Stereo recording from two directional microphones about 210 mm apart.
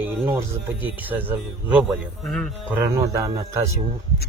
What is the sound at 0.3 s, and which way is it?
Speech, 15° right (ahead or behind).